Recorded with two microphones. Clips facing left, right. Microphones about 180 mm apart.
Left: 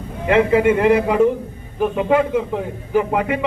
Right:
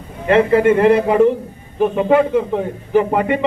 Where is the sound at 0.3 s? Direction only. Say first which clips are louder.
Right 2 dB; 10° left (ahead or behind).